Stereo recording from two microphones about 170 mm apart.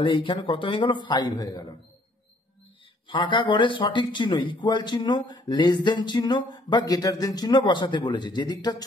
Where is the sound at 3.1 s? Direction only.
25° left (ahead or behind).